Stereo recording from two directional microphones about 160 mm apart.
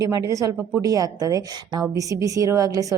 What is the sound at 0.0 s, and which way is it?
A woman's voice, 20° right (ahead or behind).